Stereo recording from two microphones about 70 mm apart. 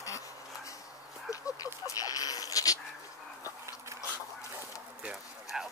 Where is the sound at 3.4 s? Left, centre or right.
Right.